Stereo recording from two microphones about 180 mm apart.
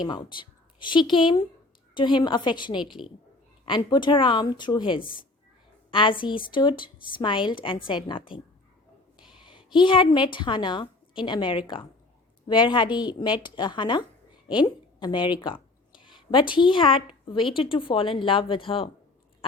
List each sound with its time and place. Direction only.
0.0 s speech: 25° left (ahead or behind)
2.8 s a woman's voice: centre (ahead or behind)
3.7 s speech: 25° left (ahead or behind)
9.4 s a sound: 30° left (ahead or behind)
9.8 s a woman's voice: 30° left (ahead or behind)